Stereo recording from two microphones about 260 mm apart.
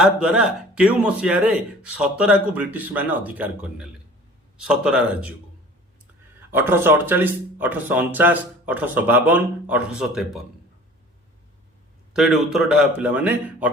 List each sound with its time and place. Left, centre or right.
0.0 s a man's voice: centre
6.5 s speech: centre
12.1 s a man's voice: centre